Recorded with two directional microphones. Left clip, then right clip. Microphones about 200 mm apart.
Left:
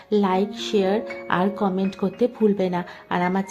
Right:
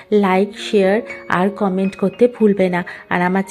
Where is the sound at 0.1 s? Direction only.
15° right (ahead or behind).